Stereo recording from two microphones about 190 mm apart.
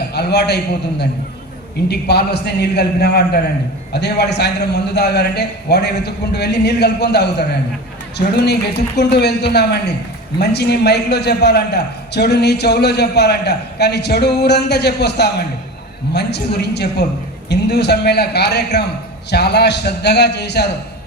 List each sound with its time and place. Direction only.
0.1 s a man's voice: 60° left (ahead or behind)